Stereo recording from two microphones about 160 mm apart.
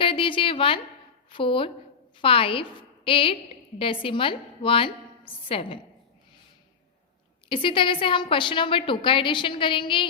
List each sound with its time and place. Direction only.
0.0 s a sound: 35° left (ahead or behind)
1.3 s a woman's voice: 30° left (ahead or behind)
7.5 s a woman's voice: 35° left (ahead or behind)